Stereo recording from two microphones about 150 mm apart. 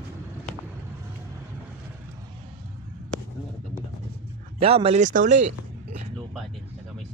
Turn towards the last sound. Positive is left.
turn(degrees=-55)  # may be behind; listen again after turning